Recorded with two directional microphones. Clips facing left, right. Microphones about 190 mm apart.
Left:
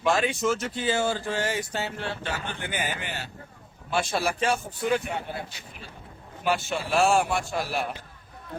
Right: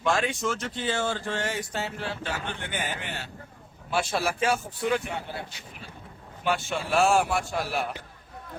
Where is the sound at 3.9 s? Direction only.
5° right (ahead or behind).